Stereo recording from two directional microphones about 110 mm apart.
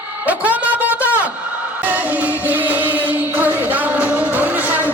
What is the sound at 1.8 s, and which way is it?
Music, 15° right (ahead or behind).